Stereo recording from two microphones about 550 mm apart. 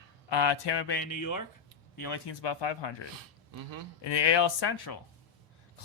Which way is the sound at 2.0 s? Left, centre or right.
Left.